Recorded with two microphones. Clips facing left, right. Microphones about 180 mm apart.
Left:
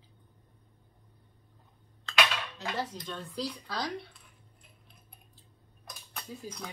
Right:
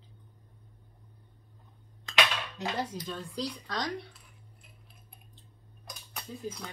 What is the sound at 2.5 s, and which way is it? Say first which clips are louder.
Dishes: right 3 dB; 15° right (ahead or behind).